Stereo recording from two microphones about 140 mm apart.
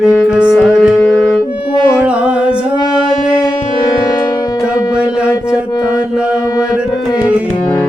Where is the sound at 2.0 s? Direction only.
10° right (ahead or behind).